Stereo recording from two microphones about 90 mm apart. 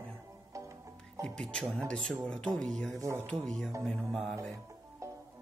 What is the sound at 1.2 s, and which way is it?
Speech, 10° left (ahead or behind).